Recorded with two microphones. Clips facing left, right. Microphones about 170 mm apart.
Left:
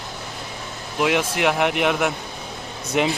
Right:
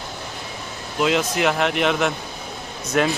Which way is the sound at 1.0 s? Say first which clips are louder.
Right 1 dB; 10° left (ahead or behind).